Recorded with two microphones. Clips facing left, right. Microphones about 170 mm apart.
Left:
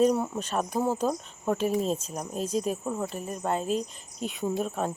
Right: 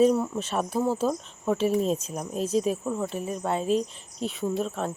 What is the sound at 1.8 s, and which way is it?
Speech, 35° left (ahead or behind).